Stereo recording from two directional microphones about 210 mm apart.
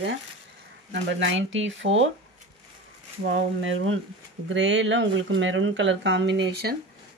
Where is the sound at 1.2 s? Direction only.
60° right (ahead or behind).